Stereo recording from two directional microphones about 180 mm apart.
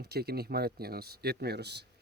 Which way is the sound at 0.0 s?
60° right (ahead or behind).